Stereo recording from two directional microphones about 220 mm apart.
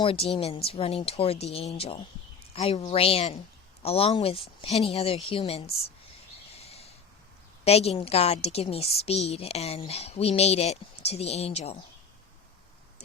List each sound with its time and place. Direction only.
0.0 s a woman's voice: 25° left (ahead or behind)
6.6 s a sound: 30° left (ahead or behind)
7.6 s a woman's voice: 25° left (ahead or behind)